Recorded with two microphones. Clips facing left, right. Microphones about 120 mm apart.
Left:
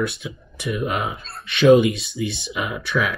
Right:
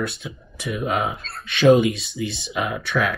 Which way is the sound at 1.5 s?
60° left (ahead or behind).